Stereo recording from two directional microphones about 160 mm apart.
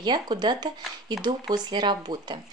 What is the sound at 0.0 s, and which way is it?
Speech, 30° right (ahead or behind).